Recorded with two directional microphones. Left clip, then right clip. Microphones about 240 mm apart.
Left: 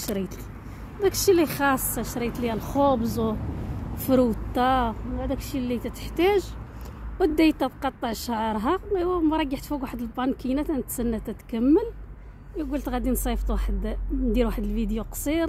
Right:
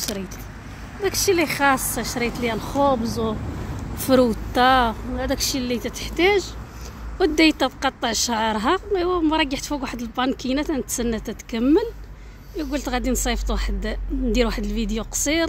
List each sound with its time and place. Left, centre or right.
1.0 s a woman's voice: left
4.1 s a woman's voice: centre